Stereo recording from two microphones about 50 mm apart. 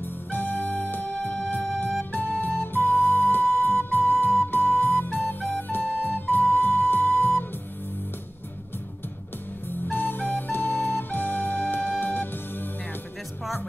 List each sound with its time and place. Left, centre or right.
0.0 s music: left
9.7 s flute: left